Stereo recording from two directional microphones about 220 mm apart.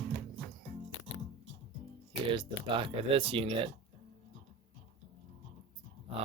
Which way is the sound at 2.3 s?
20° right (ahead or behind).